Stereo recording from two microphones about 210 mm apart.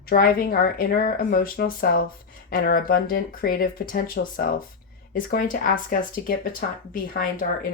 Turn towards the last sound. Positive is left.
turn(degrees=40)  # may be behind; listen again after turning